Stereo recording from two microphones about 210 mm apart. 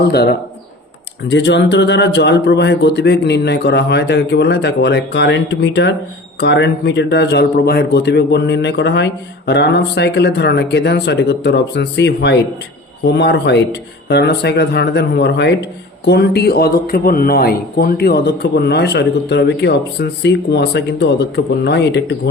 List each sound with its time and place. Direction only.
0.0 s a man's voice: 50° left (ahead or behind)